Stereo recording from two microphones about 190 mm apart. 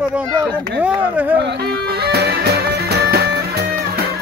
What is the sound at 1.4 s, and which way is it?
Music, 60° right (ahead or behind).